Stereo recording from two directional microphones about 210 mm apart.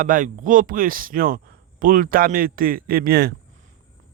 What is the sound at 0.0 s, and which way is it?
Speech, 40° right (ahead or behind).